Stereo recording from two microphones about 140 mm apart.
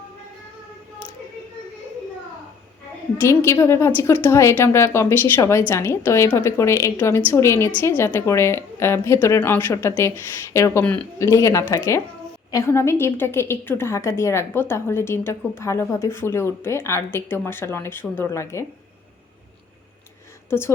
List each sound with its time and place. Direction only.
3.2 s a woman's voice: 20° left (ahead or behind)
20.5 s a woman's voice: 15° left (ahead or behind)